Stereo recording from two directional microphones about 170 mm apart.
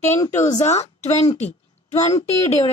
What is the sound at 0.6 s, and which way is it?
Speech, 40° left (ahead or behind).